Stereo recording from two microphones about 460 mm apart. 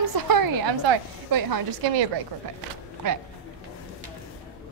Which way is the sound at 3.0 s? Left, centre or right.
Right.